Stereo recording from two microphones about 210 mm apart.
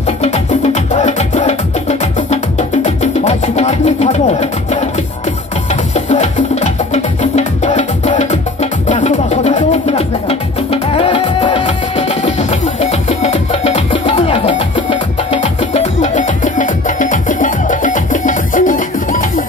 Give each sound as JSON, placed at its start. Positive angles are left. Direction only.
{"t": 0.2, "sound": "music", "side_deg": 30}
{"t": 5.9, "sound": "music", "side_deg": 35}
{"t": 13.2, "sound": "music", "side_deg": 30}